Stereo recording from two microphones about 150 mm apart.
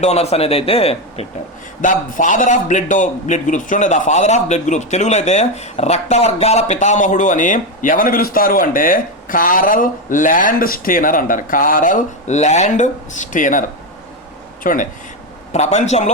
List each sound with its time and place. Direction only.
0.0 s speech: 45° left (ahead or behind)
1.8 s a man's voice: 60° left (ahead or behind)
15.5 s speech: 50° left (ahead or behind)